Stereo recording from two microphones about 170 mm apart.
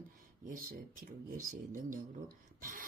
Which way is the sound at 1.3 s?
50° right (ahead or behind).